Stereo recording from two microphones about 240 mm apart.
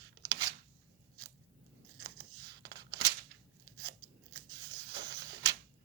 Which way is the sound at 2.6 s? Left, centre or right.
Right.